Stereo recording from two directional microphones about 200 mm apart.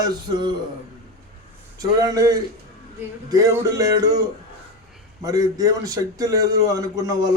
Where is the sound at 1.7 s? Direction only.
15° right (ahead or behind).